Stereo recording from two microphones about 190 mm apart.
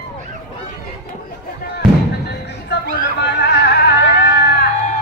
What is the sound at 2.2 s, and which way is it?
Music, 60° left (ahead or behind).